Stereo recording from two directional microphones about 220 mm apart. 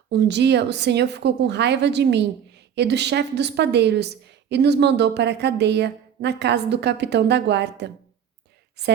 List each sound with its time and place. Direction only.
0.1 s a woman's voice: 50° right (ahead or behind)